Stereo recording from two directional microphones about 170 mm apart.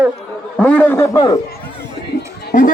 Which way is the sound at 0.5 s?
5° left (ahead or behind).